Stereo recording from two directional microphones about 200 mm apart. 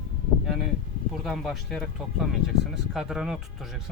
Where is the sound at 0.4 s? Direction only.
Centre (ahead or behind).